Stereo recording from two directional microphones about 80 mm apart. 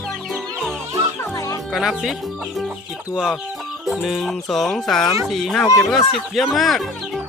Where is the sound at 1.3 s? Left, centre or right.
Left.